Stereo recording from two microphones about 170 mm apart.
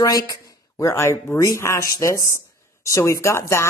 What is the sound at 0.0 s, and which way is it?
Speech, 20° left (ahead or behind).